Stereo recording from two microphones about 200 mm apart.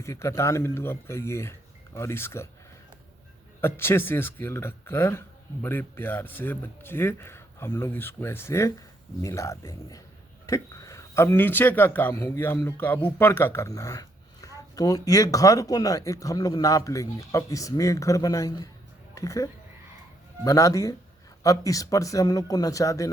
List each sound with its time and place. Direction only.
0.0 s speech: 15° left (ahead or behind)
3.6 s speech: 10° left (ahead or behind)